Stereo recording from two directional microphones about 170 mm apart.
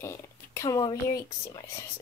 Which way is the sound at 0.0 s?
15° left (ahead or behind).